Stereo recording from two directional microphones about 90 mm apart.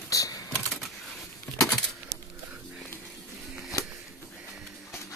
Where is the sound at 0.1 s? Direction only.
40° left (ahead or behind).